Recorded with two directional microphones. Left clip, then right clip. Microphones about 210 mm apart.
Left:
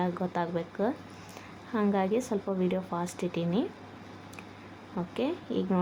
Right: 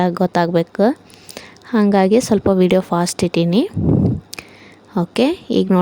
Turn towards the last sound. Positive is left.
turn(degrees=-45)  # may be behind; listen again after turning